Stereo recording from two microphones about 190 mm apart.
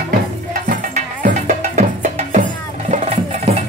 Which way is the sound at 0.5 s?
45° right (ahead or behind).